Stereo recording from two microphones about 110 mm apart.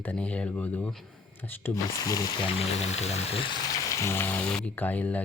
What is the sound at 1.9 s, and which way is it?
Speech, 35° left (ahead or behind).